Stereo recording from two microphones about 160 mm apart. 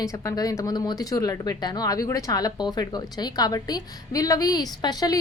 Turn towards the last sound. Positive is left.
turn(degrees=25)  # may be behind; listen again after turning